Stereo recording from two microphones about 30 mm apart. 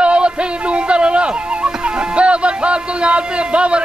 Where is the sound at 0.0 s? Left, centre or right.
Right.